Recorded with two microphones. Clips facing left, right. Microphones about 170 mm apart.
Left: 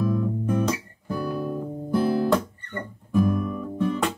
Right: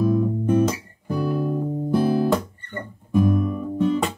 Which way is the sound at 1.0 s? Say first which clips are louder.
Right 5 dB; 20° right (ahead or behind).